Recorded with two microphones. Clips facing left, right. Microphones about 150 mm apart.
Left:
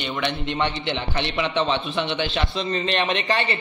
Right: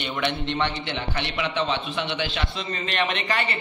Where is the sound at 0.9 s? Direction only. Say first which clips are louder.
Left 3 dB; 25° left (ahead or behind).